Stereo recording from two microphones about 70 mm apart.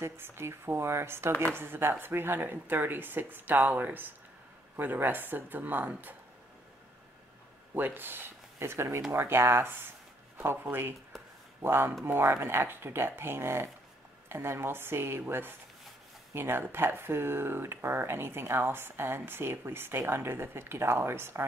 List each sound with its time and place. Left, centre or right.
0.0 s speech: right
7.7 s speech: right